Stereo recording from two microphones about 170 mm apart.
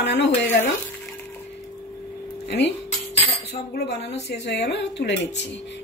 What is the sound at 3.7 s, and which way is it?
A woman's voice, 70° left (ahead or behind).